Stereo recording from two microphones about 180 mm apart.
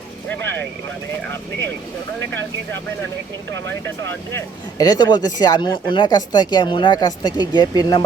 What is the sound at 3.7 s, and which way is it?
Speech, 15° left (ahead or behind).